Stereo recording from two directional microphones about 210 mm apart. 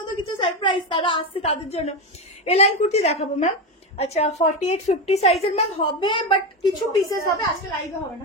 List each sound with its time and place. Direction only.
0.4 s a woman's voice: 25° left (ahead or behind)